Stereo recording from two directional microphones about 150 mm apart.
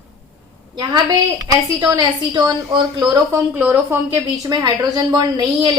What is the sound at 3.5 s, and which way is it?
Speech, 15° right (ahead or behind).